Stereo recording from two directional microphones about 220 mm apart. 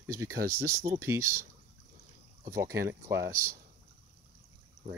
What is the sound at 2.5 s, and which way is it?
Speech, 15° right (ahead or behind).